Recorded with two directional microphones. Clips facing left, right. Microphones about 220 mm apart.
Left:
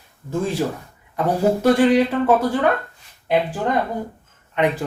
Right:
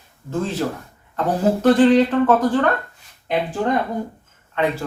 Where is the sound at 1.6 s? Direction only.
10° left (ahead or behind).